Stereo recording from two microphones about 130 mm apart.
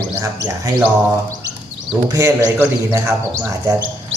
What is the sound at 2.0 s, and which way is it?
Speech, 25° right (ahead or behind).